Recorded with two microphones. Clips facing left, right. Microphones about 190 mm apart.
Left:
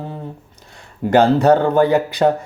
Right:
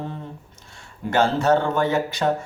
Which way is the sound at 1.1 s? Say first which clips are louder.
Left 7 dB; 35° left (ahead or behind).